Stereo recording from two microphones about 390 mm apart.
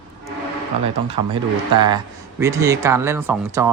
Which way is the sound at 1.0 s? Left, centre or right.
Centre.